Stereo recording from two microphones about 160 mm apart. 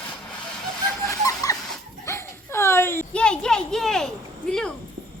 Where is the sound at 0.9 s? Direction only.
20° left (ahead or behind).